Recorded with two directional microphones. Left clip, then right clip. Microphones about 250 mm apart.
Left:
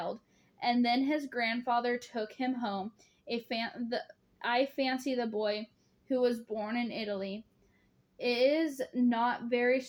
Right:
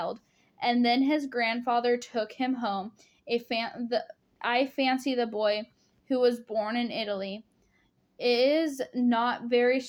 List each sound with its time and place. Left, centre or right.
0.6 s a woman's voice: right